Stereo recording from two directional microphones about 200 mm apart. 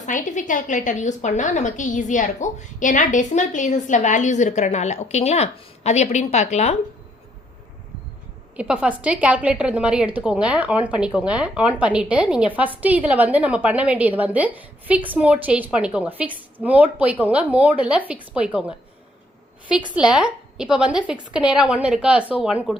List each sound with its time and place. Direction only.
0.0 s a woman's voice: 40° left (ahead or behind)
8.5 s a woman's voice: 5° right (ahead or behind)
19.9 s a woman's voice: 5° right (ahead or behind)